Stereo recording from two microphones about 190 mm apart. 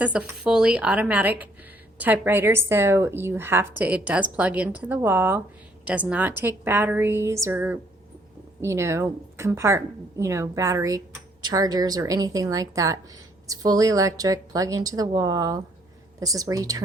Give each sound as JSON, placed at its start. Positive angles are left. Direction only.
{"t": 0.0, "sound": "a woman's voice", "side_deg": -5}